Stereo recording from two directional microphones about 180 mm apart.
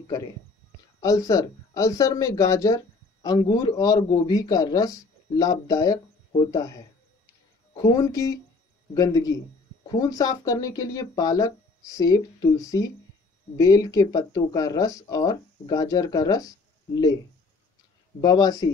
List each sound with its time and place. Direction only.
1.0 s speech: 20° left (ahead or behind)
18.2 s speech: 20° left (ahead or behind)